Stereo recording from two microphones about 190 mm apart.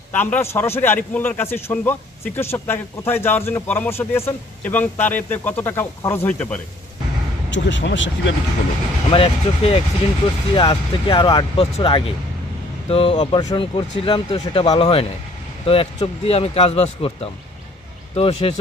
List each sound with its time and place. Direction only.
0.1 s a man's voice: 10° left (ahead or behind)
7.5 s speech: 70° left (ahead or behind)
9.0 s speech: 30° left (ahead or behind)